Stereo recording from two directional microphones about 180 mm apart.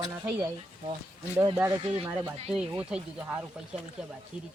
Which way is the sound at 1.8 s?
30° right (ahead or behind).